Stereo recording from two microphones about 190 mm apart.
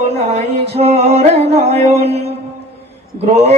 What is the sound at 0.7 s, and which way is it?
Music, 35° right (ahead or behind).